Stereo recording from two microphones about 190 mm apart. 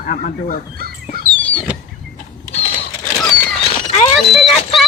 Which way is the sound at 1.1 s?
55° right (ahead or behind).